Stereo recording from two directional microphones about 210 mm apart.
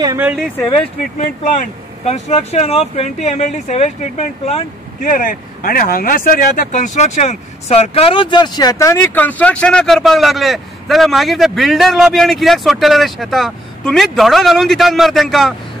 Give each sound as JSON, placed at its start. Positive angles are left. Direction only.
{"t": 0.0, "sound": "speech", "side_deg": -10}
{"t": 1.6, "sound": "speech", "side_deg": 30}